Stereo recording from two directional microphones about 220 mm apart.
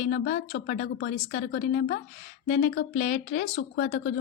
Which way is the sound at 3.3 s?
50° left (ahead or behind).